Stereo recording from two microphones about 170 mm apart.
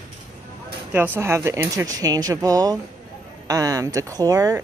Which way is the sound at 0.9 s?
10° right (ahead or behind).